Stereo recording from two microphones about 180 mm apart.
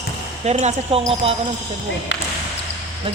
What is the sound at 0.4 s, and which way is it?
Speech, 40° right (ahead or behind).